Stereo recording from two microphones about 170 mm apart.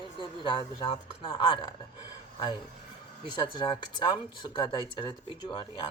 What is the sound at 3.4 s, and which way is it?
Speech, 30° left (ahead or behind).